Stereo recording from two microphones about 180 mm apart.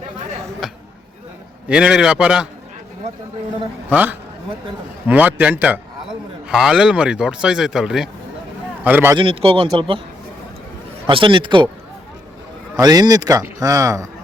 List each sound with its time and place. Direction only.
1.6 s speech: 5° right (ahead or behind)
3.8 s a man's voice: 10° right (ahead or behind)
9.1 s a man's voice: 30° right (ahead or behind)
11.0 s a man's voice: 25° right (ahead or behind)
12.7 s a man's voice: 20° right (ahead or behind)